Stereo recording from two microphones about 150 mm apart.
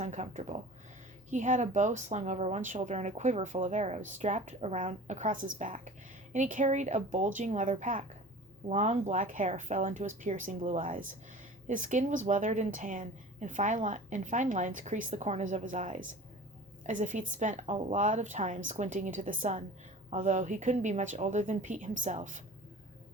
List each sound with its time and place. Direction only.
0.0 s a woman's voice: 50° right (ahead or behind)